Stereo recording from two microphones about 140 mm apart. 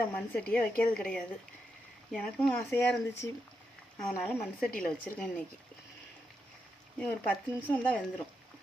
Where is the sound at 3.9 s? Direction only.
5° left (ahead or behind).